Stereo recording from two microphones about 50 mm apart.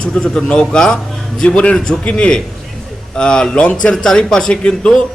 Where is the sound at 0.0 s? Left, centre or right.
Centre.